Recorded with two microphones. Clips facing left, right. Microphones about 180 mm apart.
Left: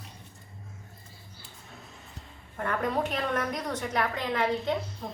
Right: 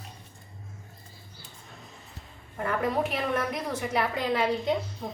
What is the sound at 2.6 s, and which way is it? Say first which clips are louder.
A woman's voice: right 2 dB; 5° right (ahead or behind).